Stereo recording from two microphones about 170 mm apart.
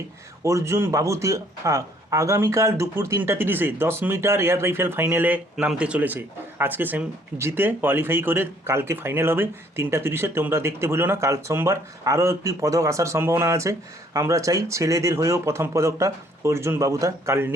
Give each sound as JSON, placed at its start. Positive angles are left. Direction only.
{"t": 0.4, "sound": "a man's voice", "side_deg": -15}